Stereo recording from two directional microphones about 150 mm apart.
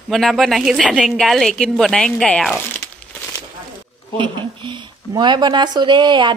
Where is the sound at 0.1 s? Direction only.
Centre (ahead or behind).